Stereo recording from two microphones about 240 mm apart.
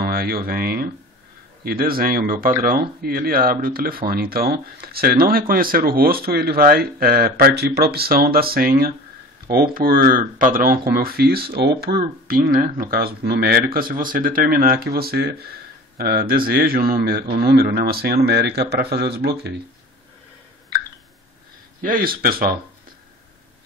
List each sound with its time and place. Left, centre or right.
0.0 s speech: right
21.8 s speech: right